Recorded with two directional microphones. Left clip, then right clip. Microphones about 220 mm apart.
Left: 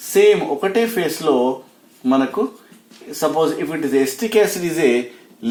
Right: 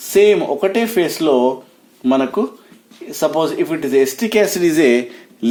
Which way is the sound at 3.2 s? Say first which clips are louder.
Right 2 dB; 50° right (ahead or behind).